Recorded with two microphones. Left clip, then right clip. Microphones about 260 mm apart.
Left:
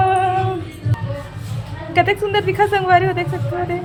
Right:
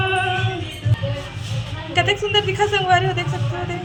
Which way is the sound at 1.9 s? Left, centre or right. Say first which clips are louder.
Left 3 dB; centre.